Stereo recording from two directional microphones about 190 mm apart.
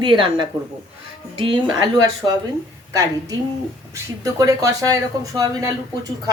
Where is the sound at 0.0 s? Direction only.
25° right (ahead or behind).